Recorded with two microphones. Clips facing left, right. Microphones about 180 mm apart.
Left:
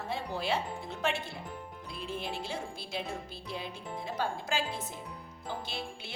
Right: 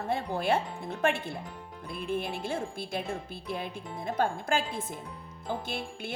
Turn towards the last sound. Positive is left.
turn(degrees=-50)  # may be behind; listen again after turning